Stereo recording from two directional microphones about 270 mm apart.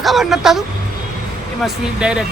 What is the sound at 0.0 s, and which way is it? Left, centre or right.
Speech, centre.